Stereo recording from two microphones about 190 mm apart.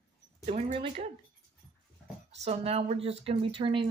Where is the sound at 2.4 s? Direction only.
30° right (ahead or behind).